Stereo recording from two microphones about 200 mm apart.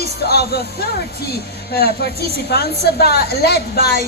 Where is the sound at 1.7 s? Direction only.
50° left (ahead or behind).